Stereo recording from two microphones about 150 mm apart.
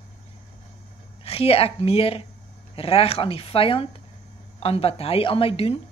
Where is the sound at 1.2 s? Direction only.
40° left (ahead or behind).